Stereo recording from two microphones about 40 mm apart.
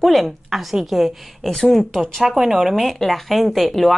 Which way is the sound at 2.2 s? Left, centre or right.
Centre.